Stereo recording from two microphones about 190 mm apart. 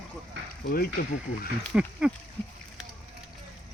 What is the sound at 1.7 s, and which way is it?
Speech, 5° right (ahead or behind).